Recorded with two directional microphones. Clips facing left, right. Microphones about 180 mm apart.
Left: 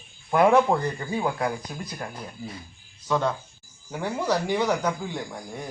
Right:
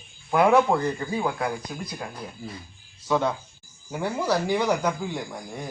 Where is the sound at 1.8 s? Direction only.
5° right (ahead or behind).